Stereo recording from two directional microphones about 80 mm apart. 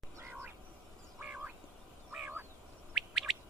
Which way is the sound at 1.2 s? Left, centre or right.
Centre.